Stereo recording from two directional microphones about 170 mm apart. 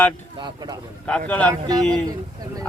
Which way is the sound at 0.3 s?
25° right (ahead or behind).